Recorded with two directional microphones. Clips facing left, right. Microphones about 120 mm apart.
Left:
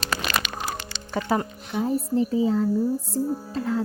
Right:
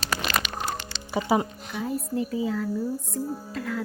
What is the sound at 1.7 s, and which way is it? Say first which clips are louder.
Speech: left 6 dB; 30° left (ahead or behind).